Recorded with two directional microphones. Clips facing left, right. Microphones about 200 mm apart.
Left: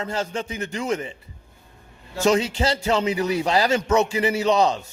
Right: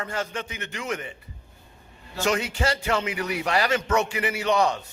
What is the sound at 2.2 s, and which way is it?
A man's voice, 25° left (ahead or behind).